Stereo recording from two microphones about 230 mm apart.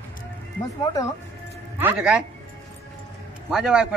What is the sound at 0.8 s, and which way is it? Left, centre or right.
Speech, centre.